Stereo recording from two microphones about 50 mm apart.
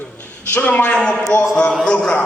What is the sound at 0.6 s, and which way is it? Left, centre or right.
Speech, left.